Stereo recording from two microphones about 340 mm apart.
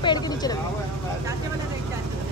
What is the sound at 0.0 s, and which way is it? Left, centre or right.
Vehicle, centre.